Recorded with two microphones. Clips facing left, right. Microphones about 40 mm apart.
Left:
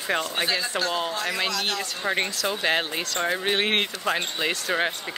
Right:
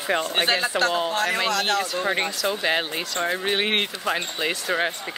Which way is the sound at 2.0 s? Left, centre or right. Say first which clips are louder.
Right 2 dB; centre.